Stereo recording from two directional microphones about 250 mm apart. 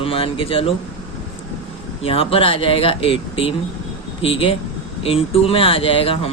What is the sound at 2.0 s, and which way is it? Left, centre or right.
Speech, left.